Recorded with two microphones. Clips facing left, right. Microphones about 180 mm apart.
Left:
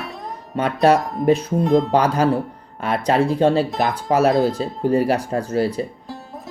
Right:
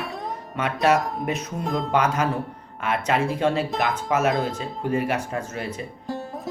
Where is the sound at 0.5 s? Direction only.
35° left (ahead or behind).